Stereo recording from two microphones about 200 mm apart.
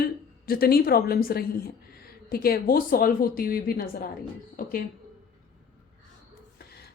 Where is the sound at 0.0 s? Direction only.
50° left (ahead or behind).